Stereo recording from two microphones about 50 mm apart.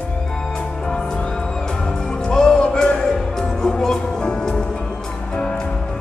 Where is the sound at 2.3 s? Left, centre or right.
Centre.